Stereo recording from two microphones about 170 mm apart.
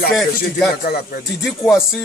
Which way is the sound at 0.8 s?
65° left (ahead or behind).